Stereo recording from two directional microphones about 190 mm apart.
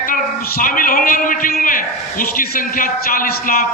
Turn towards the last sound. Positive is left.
turn(degrees=50)  # may be behind; listen again after turning